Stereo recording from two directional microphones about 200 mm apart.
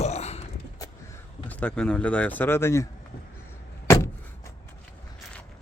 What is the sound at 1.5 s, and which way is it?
Speech, 5° left (ahead or behind).